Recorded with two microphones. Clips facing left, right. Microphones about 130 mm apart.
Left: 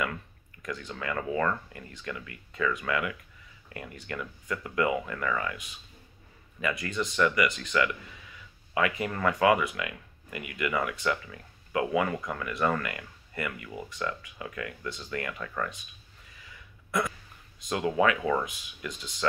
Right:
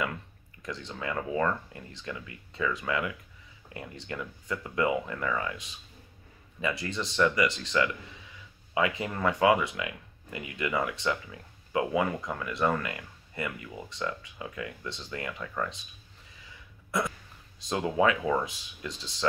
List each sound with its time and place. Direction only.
0.6 s speech: 25° right (ahead or behind)
17.6 s speech: 25° right (ahead or behind)
18.4 s speech: 30° right (ahead or behind)